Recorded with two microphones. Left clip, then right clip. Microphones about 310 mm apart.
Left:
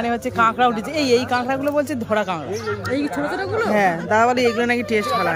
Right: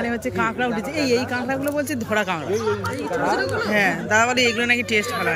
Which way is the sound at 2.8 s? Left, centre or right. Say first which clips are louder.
Left 2 dB; left.